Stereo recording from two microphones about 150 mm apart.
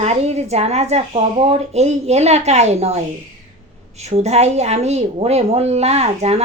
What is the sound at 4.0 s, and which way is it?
Speech, 45° right (ahead or behind).